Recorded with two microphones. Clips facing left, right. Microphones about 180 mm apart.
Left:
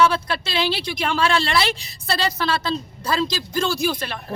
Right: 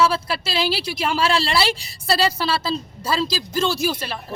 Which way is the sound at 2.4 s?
10° right (ahead or behind).